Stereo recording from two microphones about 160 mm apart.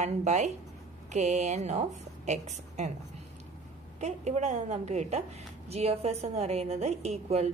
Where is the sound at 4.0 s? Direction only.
45° right (ahead or behind).